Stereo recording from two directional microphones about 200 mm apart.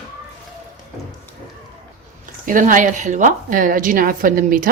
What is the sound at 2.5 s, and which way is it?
A woman's voice, 40° right (ahead or behind).